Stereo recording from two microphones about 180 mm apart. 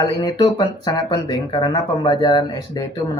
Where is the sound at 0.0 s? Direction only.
20° left (ahead or behind).